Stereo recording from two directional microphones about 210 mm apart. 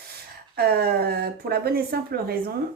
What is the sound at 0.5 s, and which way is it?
Speech, 45° right (ahead or behind).